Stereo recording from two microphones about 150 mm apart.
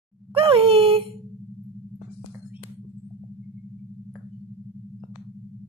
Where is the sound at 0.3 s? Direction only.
35° right (ahead or behind).